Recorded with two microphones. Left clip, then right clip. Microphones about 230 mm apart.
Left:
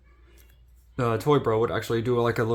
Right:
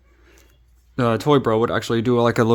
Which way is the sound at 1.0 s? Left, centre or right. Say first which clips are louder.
Right 5 dB; right.